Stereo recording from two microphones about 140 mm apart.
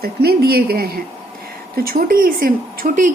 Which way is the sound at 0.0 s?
90° right.